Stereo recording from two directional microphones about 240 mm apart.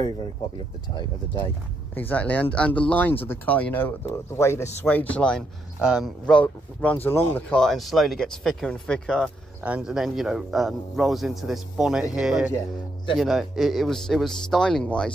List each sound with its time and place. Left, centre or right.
0.9 s speech: centre
2.0 s speech: centre